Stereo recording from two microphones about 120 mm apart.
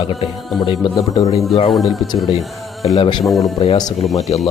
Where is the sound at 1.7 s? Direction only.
Centre (ahead or behind).